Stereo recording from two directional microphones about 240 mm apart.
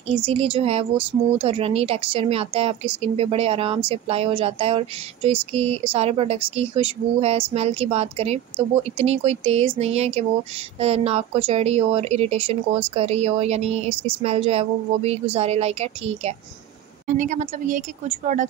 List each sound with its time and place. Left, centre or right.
0.1 s a woman's voice: right